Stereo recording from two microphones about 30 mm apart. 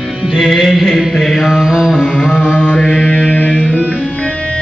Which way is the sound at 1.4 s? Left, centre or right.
Centre.